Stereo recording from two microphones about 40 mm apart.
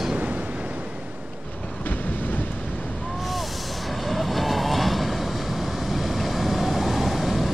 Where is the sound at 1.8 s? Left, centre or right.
Left.